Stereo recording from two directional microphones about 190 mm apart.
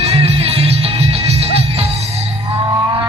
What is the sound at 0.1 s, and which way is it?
Music, 30° right (ahead or behind).